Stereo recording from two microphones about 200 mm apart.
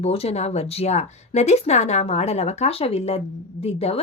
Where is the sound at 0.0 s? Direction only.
30° left (ahead or behind).